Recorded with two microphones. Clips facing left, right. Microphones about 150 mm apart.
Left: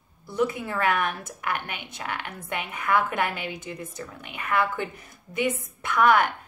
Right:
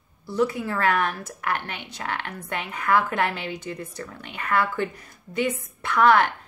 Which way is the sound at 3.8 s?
15° left (ahead or behind).